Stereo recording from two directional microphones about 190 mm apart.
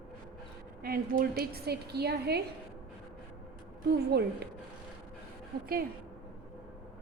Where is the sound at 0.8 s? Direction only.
50° right (ahead or behind).